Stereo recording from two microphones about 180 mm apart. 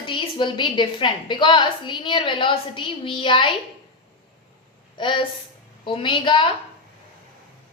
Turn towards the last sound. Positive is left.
turn(degrees=30)  # may be behind; listen again after turning